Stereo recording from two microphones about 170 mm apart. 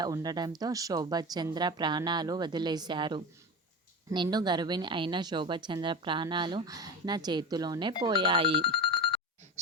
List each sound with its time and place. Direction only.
0.0 s speech: 20° right (ahead or behind)
8.6 s telephone bell ringing: 30° left (ahead or behind)